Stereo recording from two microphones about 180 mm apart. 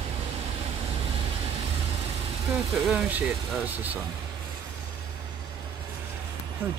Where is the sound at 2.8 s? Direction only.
5° right (ahead or behind).